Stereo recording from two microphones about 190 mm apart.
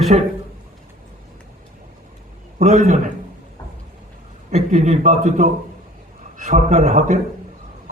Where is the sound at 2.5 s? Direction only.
40° right (ahead or behind).